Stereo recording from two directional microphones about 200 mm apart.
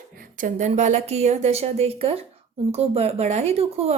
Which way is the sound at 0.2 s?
40° right (ahead or behind).